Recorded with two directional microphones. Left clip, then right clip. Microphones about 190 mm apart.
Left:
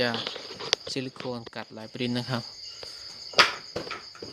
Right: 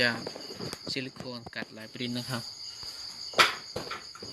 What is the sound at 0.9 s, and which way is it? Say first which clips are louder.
Speech: left 4 dB; 20° left (ahead or behind).